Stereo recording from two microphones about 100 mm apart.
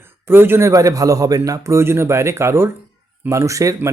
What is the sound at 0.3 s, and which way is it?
Speech, 20° right (ahead or behind).